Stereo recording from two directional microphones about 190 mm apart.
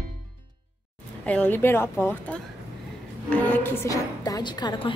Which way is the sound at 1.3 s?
10° left (ahead or behind).